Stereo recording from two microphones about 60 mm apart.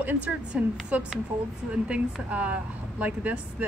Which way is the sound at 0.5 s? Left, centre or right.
Centre.